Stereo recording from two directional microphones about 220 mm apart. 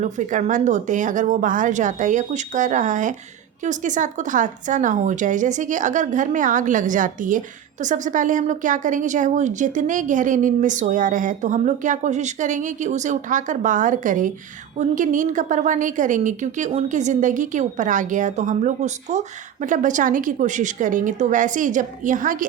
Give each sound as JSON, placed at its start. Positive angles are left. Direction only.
{"t": 0.0, "sound": "a woman's voice", "side_deg": -35}